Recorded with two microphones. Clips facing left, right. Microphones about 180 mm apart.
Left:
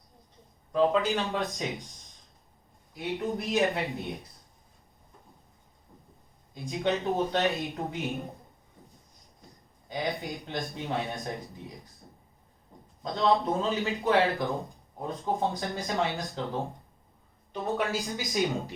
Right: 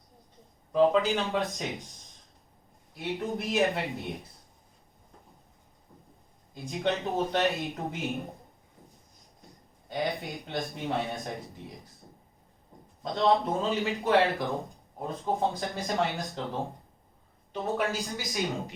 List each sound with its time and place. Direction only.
0.7 s speech: centre (ahead or behind)
3.0 s speech: centre (ahead or behind)
6.5 s speech: centre (ahead or behind)
9.9 s speech: centre (ahead or behind)
13.0 s speech: centre (ahead or behind)
17.9 s speech: 15° left (ahead or behind)